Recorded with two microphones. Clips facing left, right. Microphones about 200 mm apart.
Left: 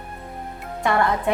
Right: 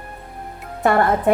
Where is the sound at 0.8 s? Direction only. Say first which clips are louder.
Right 4 dB; 50° right (ahead or behind).